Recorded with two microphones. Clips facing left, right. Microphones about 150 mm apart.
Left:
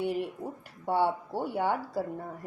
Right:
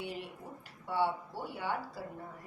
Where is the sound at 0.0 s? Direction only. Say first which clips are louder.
Left 10 dB; 50° left (ahead or behind).